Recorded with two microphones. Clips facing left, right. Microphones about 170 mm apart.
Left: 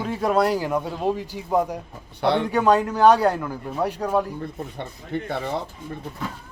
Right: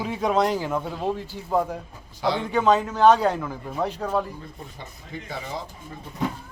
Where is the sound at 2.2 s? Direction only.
65° left (ahead or behind).